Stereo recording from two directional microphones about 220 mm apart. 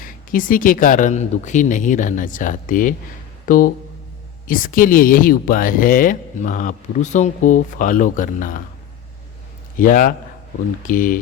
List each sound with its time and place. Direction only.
0.0 s speech: 40° left (ahead or behind)
9.7 s speech: 40° left (ahead or behind)